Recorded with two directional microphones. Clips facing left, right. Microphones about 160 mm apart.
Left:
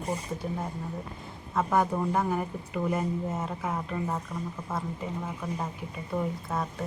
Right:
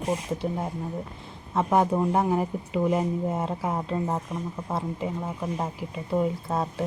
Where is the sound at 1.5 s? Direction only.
25° right (ahead or behind).